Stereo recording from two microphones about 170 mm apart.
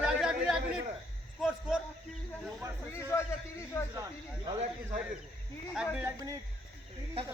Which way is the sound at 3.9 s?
20° right (ahead or behind).